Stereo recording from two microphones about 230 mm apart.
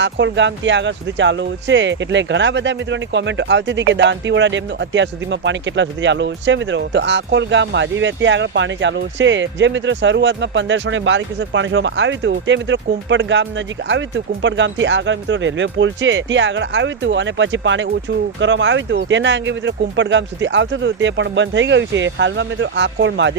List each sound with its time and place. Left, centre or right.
0.0 s speech: right